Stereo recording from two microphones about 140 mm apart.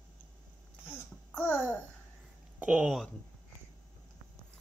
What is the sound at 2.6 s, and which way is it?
Speech, 10° right (ahead or behind).